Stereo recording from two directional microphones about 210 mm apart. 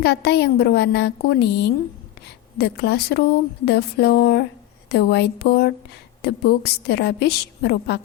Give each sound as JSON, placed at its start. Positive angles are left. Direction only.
{"t": 0.0, "sound": "a woman's voice", "side_deg": 50}